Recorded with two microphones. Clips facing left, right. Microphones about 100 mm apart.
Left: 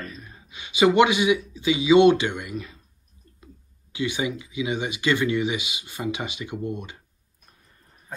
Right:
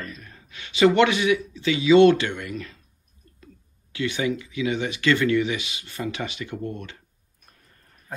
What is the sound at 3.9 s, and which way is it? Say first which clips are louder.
Speech: right 1 dB; 15° left (ahead or behind).